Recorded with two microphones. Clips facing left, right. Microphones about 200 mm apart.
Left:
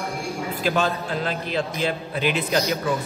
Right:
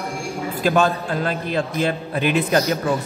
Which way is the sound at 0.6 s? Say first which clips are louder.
Right 5 dB; 50° right (ahead or behind).